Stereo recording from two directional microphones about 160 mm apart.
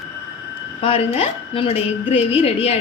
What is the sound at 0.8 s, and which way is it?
A woman's voice, 40° left (ahead or behind).